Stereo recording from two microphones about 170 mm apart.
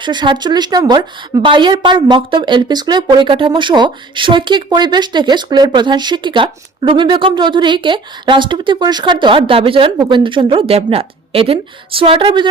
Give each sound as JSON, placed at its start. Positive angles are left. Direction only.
{"t": 0.0, "sound": "a woman's voice", "side_deg": -25}